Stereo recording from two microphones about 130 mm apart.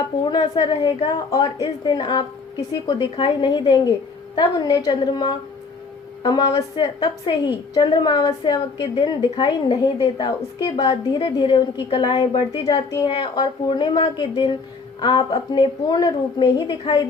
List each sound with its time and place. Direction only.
0.3 s a woman's voice: 40° left (ahead or behind)
1.3 s a woman's voice: 30° left (ahead or behind)
13.1 s a woman's voice: 40° left (ahead or behind)